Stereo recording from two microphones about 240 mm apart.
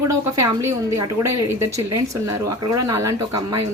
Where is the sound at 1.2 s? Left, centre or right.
Right.